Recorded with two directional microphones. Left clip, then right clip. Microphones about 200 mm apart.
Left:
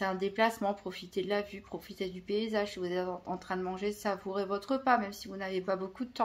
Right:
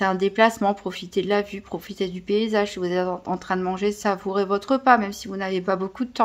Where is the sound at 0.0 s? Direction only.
40° right (ahead or behind).